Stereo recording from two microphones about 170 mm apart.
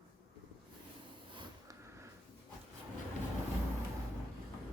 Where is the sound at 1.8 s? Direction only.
15° right (ahead or behind).